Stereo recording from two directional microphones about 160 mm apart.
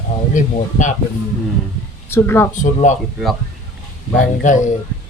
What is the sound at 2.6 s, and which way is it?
Speech, 50° left (ahead or behind).